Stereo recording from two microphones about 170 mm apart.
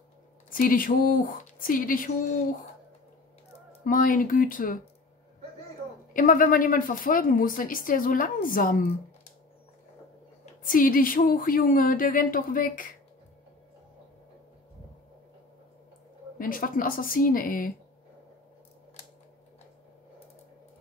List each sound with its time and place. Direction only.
0.5 s a woman's voice: 55° left (ahead or behind)
3.8 s speech: 55° left (ahead or behind)
6.1 s a woman's voice: 55° left (ahead or behind)
10.4 s a woman's voice: 55° left (ahead or behind)
16.3 s a woman's voice: 55° left (ahead or behind)